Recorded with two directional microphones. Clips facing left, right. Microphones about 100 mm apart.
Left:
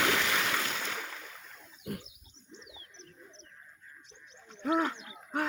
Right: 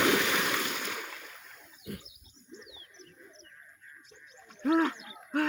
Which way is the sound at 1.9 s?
45° left (ahead or behind).